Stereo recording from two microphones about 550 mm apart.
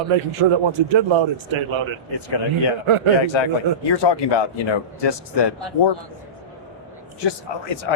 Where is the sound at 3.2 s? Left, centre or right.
Left.